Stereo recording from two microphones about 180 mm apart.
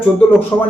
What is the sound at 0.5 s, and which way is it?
Speech, 20° left (ahead or behind).